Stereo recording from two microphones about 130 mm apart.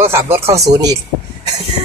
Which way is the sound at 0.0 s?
20° right (ahead or behind).